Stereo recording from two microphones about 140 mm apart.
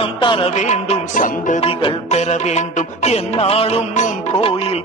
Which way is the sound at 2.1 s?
55° left (ahead or behind).